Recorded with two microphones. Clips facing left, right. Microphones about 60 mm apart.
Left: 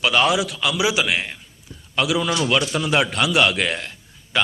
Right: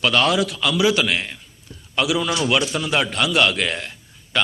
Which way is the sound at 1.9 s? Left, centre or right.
Centre.